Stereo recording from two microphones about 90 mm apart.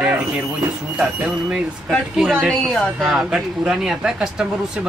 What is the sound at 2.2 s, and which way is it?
Speech, 5° left (ahead or behind).